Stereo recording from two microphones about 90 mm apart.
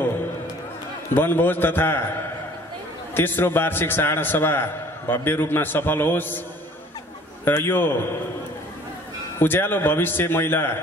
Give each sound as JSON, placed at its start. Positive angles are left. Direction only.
{"t": 1.1, "sound": "a man's voice", "side_deg": 25}
{"t": 3.2, "sound": "a man's voice", "side_deg": 25}
{"t": 7.4, "sound": "a man's voice", "side_deg": 25}
{"t": 9.4, "sound": "a man's voice", "side_deg": 25}